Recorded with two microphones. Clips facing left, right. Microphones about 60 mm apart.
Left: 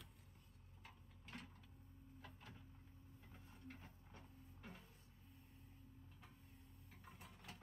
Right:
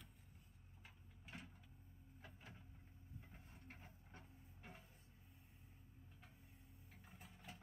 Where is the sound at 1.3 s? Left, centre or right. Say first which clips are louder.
Left 1 dB; centre.